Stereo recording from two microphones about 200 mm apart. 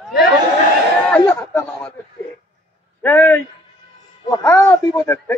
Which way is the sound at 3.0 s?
10° left (ahead or behind).